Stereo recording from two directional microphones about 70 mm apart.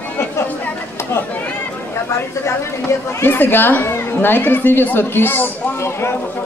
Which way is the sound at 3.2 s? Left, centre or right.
Left.